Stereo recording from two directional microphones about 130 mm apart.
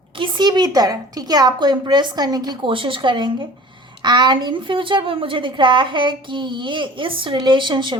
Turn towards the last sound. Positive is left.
turn(degrees=-35)  # may be behind; listen again after turning